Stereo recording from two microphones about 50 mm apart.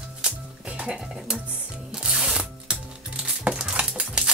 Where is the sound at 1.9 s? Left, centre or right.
Centre.